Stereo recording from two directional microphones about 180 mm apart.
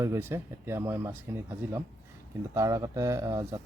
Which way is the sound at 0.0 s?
15° right (ahead or behind).